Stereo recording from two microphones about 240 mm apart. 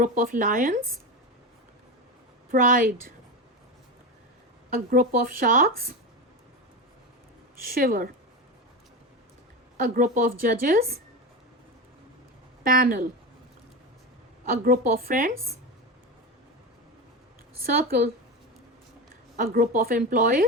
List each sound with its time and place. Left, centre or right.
0.0 s a woman's voice: right
2.5 s a woman's voice: right
4.7 s a woman's voice: right
7.6 s a woman's voice: right
9.7 s a woman's voice: right
12.6 s a woman's voice: right
14.6 s a woman's voice: right
19.4 s a woman's voice: right